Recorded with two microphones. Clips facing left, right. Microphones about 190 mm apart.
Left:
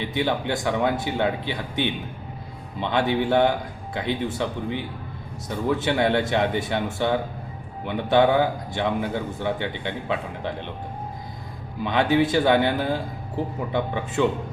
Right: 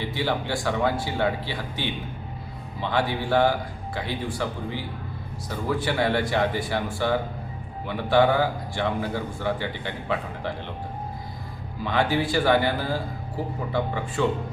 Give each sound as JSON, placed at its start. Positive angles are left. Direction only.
{"t": 0.0, "sound": "a man's voice", "side_deg": 20}
{"t": 11.8, "sound": "a man's voice", "side_deg": 20}